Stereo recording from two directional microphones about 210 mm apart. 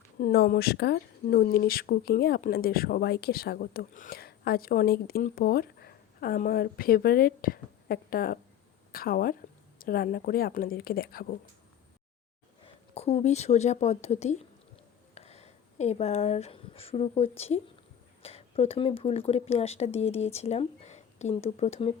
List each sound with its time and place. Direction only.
0.2 s speech: 45° left (ahead or behind)
12.6 s speech: 30° left (ahead or behind)